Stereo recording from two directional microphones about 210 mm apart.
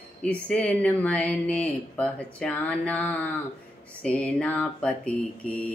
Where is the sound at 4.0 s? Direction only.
5° left (ahead or behind).